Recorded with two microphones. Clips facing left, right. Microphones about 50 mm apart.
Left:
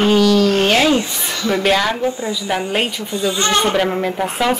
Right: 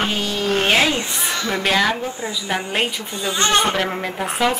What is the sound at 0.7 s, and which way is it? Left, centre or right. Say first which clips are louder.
Speech: left 3 dB; centre.